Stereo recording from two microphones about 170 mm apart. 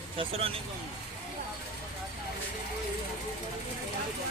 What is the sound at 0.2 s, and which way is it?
Speech, 35° right (ahead or behind).